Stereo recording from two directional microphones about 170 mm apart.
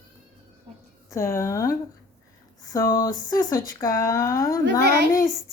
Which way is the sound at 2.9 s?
20° left (ahead or behind).